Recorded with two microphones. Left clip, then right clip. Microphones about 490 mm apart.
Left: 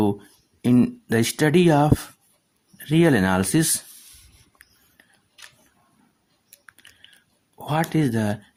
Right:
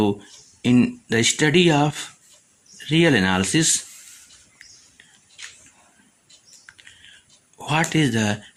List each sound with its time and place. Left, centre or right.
0.6 s speech: left
6.7 s a sound: left
7.6 s speech: left